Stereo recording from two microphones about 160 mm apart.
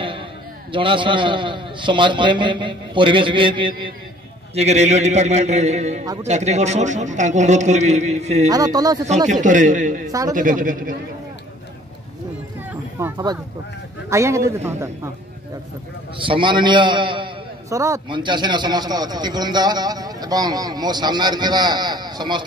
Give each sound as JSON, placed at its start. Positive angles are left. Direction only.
{"t": 0.7, "sound": "a man's voice", "side_deg": -30}
{"t": 4.6, "sound": "a man's voice", "side_deg": -45}
{"t": 8.5, "sound": "a man's voice", "side_deg": -25}
{"t": 9.3, "sound": "a man's voice", "side_deg": -50}
{"t": 13.0, "sound": "a man's voice", "side_deg": -20}
{"t": 16.2, "sound": "a man's voice", "side_deg": -30}
{"t": 17.6, "sound": "a man's voice", "side_deg": -20}
{"t": 18.0, "sound": "a man's voice", "side_deg": -30}